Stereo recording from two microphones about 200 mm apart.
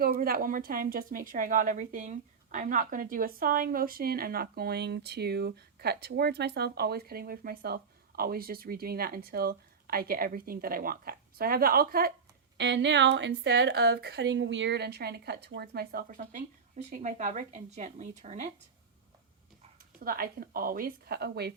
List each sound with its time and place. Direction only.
0.0 s a woman's voice: 45° right (ahead or behind)
12.5 s a woman's voice: 60° right (ahead or behind); by 18.5 s 40° right (ahead or behind)
20.0 s a woman's voice: 45° right (ahead or behind)